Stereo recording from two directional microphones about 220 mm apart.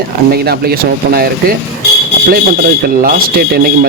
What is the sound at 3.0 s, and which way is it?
Speech, 40° right (ahead or behind).